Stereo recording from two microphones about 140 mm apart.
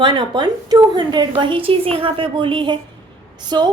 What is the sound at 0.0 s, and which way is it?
A woman's voice, 35° right (ahead or behind).